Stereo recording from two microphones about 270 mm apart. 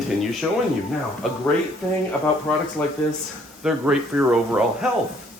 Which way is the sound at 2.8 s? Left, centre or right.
Centre.